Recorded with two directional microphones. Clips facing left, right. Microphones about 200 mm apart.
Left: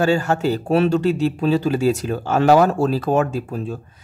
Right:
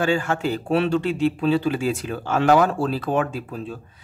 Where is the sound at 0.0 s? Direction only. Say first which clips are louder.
Left 4 dB; 40° left (ahead or behind).